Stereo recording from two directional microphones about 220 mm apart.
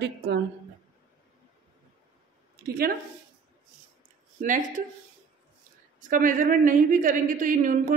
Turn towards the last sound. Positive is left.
turn(degrees=-35)  # may be behind; listen again after turning